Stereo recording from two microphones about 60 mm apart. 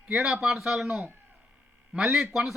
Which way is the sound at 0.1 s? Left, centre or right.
Centre.